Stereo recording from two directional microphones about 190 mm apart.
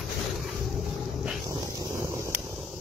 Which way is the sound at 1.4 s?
15° right (ahead or behind).